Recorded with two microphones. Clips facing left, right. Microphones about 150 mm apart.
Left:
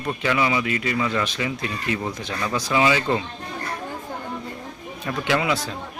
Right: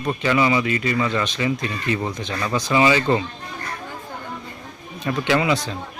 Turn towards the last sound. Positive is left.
turn(degrees=0)  # may be behind; listen again after turning